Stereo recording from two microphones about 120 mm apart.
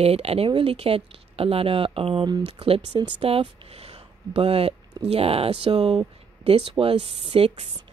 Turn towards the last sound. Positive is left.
turn(degrees=-60)  # may be behind; listen again after turning